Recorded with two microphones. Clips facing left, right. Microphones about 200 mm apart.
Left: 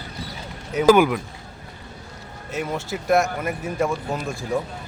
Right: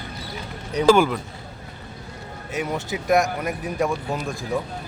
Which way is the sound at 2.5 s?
Centre (ahead or behind).